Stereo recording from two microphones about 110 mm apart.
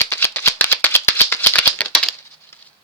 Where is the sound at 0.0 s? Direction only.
20° left (ahead or behind).